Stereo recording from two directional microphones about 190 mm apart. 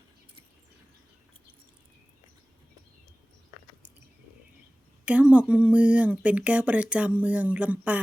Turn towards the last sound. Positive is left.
turn(degrees=-5)  # may be behind; listen again after turning